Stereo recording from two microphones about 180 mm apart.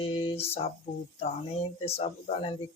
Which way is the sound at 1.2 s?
35° left (ahead or behind).